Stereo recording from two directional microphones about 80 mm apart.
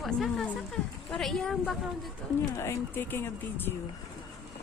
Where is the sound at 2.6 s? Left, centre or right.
Left.